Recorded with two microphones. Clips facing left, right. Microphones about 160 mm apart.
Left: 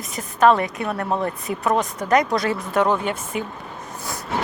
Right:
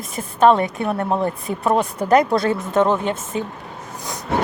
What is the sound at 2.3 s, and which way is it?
Speech, 25° right (ahead or behind).